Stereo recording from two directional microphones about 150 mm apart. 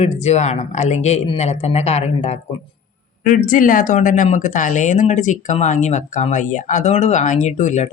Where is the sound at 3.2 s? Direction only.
65° left (ahead or behind).